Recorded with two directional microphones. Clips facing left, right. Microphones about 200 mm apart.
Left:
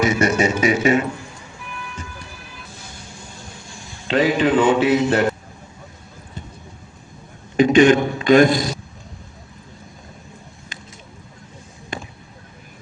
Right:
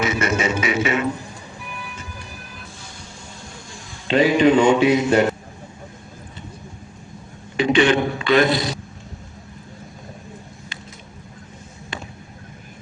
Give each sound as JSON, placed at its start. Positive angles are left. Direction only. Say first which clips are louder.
{"t": 0.0, "sound": "music", "louder": "left 4 dB", "side_deg": 40}
{"t": 4.1, "sound": "mantra", "louder": "right 2 dB", "side_deg": -10}
{"t": 7.5, "sound": "a sound", "louder": "left 4 dB", "side_deg": 45}